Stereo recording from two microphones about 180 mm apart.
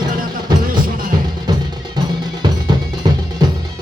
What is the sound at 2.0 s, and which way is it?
Cowbell, 25° right (ahead or behind).